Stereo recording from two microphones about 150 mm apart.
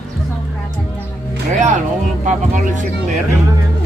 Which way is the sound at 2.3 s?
55° right (ahead or behind).